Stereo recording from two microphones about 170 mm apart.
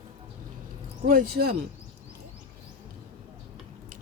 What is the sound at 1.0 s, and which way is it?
Speech, 60° right (ahead or behind).